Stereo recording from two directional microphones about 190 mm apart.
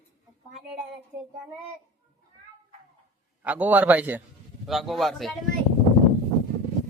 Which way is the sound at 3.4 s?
10° right (ahead or behind).